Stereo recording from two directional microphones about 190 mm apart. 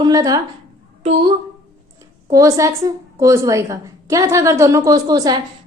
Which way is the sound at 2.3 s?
15° right (ahead or behind).